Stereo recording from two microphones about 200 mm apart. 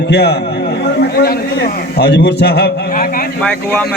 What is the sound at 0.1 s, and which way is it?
A man's voice, 55° left (ahead or behind).